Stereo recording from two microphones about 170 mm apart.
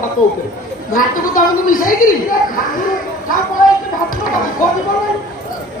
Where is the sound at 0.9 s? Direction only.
55° left (ahead or behind).